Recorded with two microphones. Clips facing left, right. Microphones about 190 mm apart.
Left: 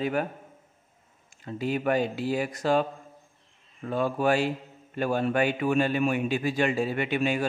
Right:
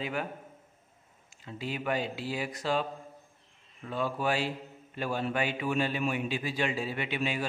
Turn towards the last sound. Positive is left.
turn(degrees=50)  # may be behind; listen again after turning